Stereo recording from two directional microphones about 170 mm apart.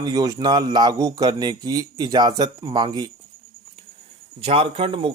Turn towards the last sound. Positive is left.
turn(degrees=-30)  # may be behind; listen again after turning